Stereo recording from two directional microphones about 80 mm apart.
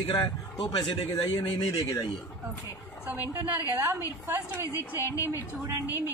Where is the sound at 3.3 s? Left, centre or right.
Right.